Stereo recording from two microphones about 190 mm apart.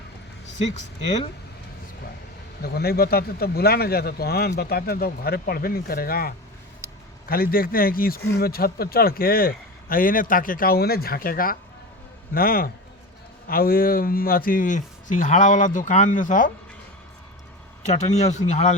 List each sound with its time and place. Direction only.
2.6 s a man's voice: 55° left (ahead or behind)
6.8 s a sound: 15° right (ahead or behind)
7.3 s a man's voice: 50° left (ahead or behind)
17.8 s a man's voice: 35° left (ahead or behind)